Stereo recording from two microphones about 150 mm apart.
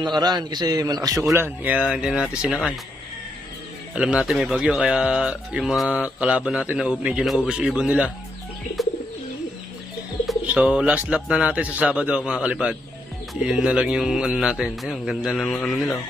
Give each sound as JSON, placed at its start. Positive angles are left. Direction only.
{"t": 0.2, "sound": "a man's voice", "side_deg": -30}
{"t": 1.3, "sound": "speech", "side_deg": -15}
{"t": 3.9, "sound": "speech", "side_deg": -5}
{"t": 10.2, "sound": "speech", "side_deg": -10}